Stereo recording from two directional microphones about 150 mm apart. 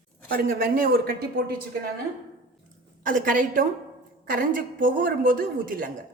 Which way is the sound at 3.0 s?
65° right (ahead or behind).